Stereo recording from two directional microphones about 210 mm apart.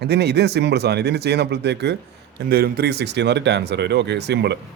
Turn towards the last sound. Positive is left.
turn(degrees=-55)  # may be behind; listen again after turning